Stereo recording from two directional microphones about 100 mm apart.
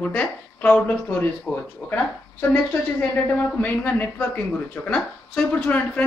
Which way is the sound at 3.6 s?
15° left (ahead or behind).